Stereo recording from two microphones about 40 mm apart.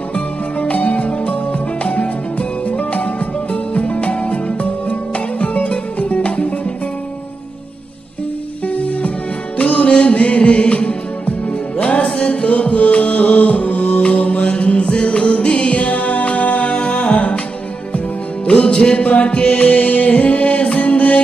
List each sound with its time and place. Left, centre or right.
0.1 s music: left
8.6 s music: left
19.7 s music: left